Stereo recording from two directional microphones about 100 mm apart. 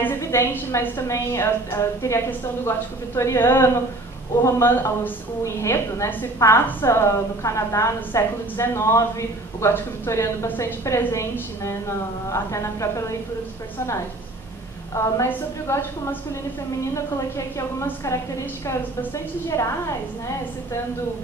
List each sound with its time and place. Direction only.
0.0 s a woman's voice: 25° left (ahead or behind)
15.2 s a woman's voice: 25° left (ahead or behind)
17.6 s a woman's voice: 30° left (ahead or behind)